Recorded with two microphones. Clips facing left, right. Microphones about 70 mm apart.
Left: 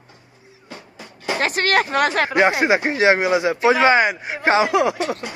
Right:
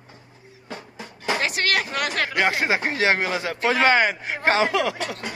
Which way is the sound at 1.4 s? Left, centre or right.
Left.